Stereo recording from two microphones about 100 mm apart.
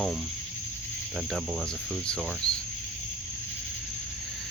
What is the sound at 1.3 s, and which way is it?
Speech, 5° right (ahead or behind).